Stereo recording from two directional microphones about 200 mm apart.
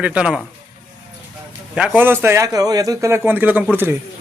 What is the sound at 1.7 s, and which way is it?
A man's voice, 5° right (ahead or behind).